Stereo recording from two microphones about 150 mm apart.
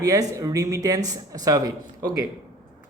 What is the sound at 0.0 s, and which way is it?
Speech, 20° right (ahead or behind).